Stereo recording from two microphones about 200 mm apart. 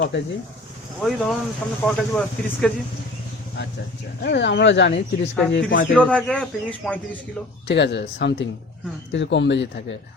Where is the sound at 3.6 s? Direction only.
60° left (ahead or behind).